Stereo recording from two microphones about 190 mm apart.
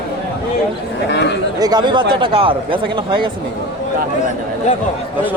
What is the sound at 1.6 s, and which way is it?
Speech, 20° right (ahead or behind).